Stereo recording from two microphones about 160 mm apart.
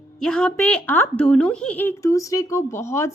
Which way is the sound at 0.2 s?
5° left (ahead or behind).